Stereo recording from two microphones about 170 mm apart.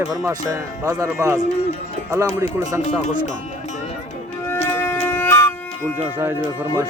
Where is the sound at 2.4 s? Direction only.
15° right (ahead or behind).